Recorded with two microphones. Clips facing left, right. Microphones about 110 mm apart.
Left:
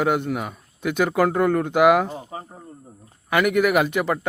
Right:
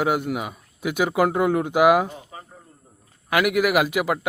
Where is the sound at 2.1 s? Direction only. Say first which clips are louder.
Left 6 dB; 35° left (ahead or behind).